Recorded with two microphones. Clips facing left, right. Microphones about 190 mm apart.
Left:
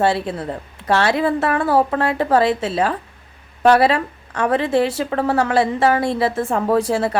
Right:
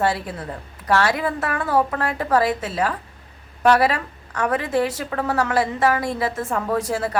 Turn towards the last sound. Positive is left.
turn(degrees=30)  # may be behind; listen again after turning